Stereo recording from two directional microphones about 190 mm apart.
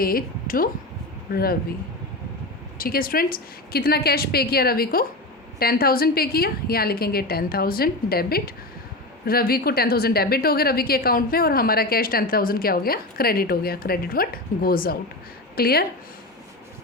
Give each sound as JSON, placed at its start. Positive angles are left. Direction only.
{"t": 0.0, "sound": "a woman's voice", "side_deg": 50}
{"t": 2.7, "sound": "a woman's voice", "side_deg": 50}